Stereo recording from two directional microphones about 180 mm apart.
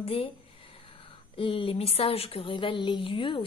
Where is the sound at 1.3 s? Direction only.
30° left (ahead or behind).